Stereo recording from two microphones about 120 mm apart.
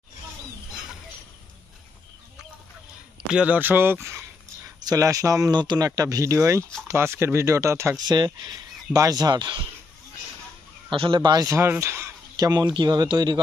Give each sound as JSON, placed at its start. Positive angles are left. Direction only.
{"t": 3.3, "sound": "speech", "side_deg": -10}
{"t": 8.1, "sound": "speech", "side_deg": -35}
{"t": 10.9, "sound": "speech", "side_deg": -45}